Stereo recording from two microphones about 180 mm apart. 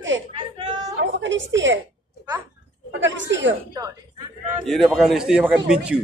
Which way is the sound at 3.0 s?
85° right.